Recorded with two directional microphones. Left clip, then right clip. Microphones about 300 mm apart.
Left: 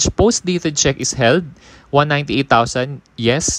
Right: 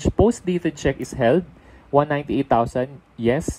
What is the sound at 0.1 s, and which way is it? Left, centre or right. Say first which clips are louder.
Speech: left 4 dB; right.